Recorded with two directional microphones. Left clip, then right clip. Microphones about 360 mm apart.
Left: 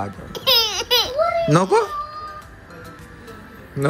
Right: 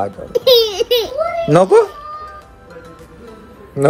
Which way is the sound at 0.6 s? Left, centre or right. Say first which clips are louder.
Right 4 dB; centre.